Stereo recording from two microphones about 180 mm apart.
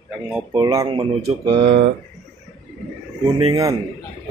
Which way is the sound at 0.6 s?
20° right (ahead or behind).